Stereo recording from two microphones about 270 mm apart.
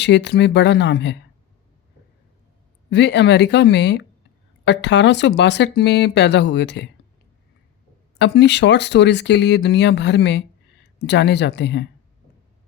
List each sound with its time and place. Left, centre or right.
0.0 s speech: left
2.9 s speech: left
8.2 s speech: left